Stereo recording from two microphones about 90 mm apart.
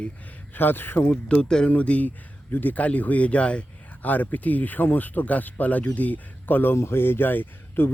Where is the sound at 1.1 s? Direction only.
10° left (ahead or behind).